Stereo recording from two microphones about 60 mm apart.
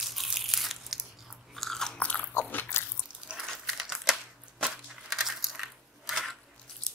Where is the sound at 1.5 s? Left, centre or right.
Centre.